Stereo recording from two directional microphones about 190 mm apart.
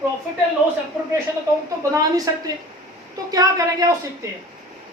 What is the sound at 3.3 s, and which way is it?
Speech, 20° right (ahead or behind).